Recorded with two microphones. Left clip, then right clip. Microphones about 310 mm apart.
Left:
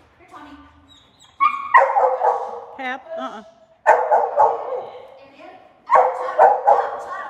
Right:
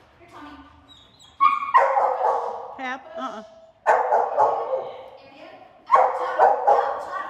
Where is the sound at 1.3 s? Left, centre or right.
Centre.